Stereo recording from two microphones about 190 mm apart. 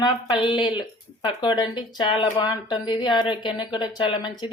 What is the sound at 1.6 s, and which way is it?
Speech, 25° left (ahead or behind).